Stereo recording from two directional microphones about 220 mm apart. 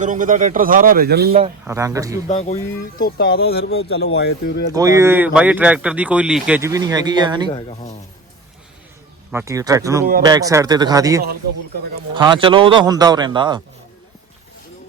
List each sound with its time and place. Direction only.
0.0 s a man's voice: 35° right (ahead or behind)
1.6 s speech: 15° right (ahead or behind)
2.2 s speech: 30° left (ahead or behind)
3.0 s speech: 45° left (ahead or behind)
4.7 s speech: 15° right (ahead or behind)
9.3 s speech: 15° right (ahead or behind)